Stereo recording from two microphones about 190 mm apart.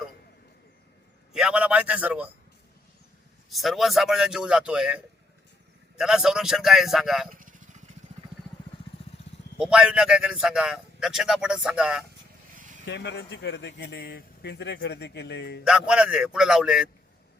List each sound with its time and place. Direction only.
1.3 s a man's voice: 5° right (ahead or behind)
3.5 s a man's voice: centre (ahead or behind)
7.3 s vehicle: 45° right (ahead or behind)
9.6 s a man's voice: 5° right (ahead or behind)
12.5 s vehicle: 45° right (ahead or behind)
12.8 s speech: 65° left (ahead or behind)
15.6 s a man's voice: 5° right (ahead or behind)